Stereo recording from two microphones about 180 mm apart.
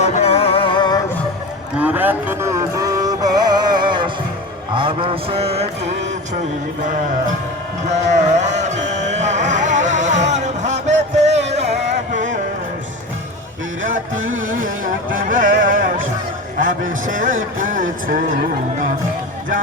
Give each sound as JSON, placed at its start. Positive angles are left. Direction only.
{"t": 0.0, "sound": "music", "side_deg": 35}
{"t": 1.8, "sound": "music", "side_deg": -10}
{"t": 4.7, "sound": "mantra", "side_deg": -30}
{"t": 7.9, "sound": "music", "side_deg": -40}
{"t": 15.1, "sound": "a sound", "side_deg": -50}